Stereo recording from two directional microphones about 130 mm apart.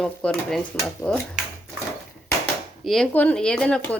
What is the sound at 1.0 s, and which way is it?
Speech, 20° left (ahead or behind).